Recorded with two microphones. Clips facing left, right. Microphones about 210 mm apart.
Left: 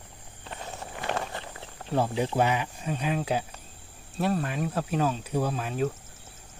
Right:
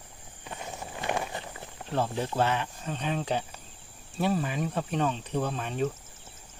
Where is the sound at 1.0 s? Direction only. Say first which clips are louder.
Even; 15° right (ahead or behind).